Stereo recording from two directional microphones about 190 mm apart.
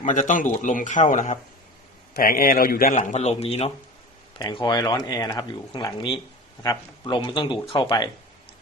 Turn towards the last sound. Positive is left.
turn(degrees=25)  # may be behind; listen again after turning